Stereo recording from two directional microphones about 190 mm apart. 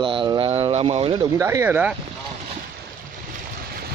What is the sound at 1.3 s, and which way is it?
Speech, 15° right (ahead or behind).